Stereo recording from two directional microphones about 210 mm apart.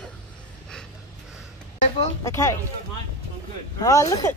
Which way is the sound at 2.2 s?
15° left (ahead or behind).